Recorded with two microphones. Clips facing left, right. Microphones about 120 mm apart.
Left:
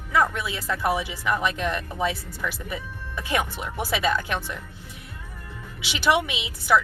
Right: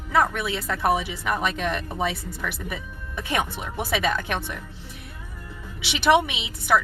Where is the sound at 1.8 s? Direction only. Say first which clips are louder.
Even; 25° right (ahead or behind).